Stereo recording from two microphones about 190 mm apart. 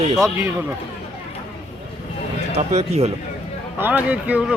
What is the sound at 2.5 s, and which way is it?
Speech, 35° right (ahead or behind).